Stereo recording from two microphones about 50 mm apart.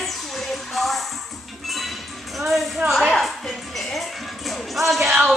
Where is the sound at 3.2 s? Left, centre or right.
Centre.